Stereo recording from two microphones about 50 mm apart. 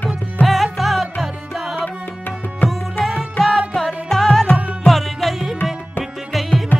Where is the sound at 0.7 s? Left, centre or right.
Centre.